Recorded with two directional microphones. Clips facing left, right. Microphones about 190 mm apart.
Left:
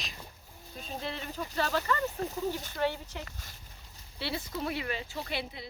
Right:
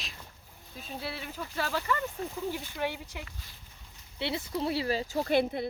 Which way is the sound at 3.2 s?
45° left (ahead or behind).